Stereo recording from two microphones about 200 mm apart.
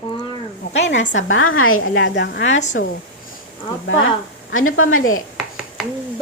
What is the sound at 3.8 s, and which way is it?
Speech, 70° left (ahead or behind).